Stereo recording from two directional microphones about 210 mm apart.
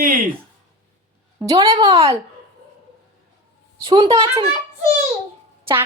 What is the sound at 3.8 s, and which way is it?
Speech, 25° right (ahead or behind).